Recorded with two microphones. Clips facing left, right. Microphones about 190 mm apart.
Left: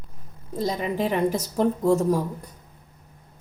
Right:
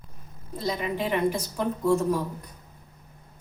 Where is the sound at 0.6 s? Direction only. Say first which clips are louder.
Left 2 dB; 35° left (ahead or behind).